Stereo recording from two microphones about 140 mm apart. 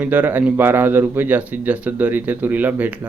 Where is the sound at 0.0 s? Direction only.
10° right (ahead or behind).